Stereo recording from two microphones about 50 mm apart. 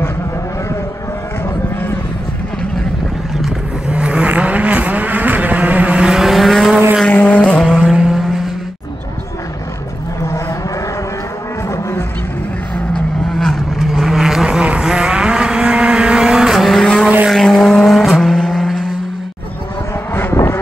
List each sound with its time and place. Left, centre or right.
3.9 s vehicle: right
5.9 s vehicle: centre
7.1 s vehicle: left
7.4 s vehicle: centre
7.9 s vehicle: centre
12.9 s vehicle: centre
13.7 s vehicle: centre
16.5 s vehicle: centre
17.8 s vehicle: centre